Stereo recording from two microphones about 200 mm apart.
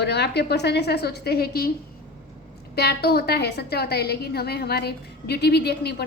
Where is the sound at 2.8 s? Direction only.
50° left (ahead or behind).